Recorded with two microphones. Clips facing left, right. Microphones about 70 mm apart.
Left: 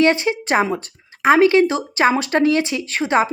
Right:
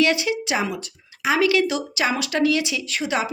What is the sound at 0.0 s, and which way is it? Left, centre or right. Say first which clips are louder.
Speech: left 4 dB; left.